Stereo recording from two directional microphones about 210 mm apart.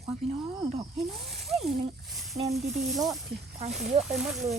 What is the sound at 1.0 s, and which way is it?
Speech, centre (ahead or behind).